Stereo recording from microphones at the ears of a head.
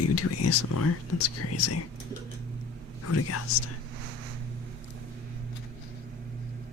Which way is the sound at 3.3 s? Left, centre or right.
Left.